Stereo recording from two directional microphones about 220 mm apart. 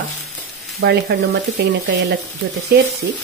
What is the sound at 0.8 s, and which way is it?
Speech, 50° right (ahead or behind).